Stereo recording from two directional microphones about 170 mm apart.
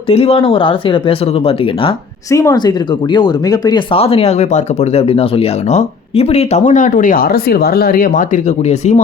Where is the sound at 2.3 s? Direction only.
20° left (ahead or behind).